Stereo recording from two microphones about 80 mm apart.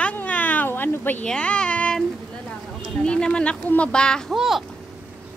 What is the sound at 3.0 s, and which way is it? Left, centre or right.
Speech, centre.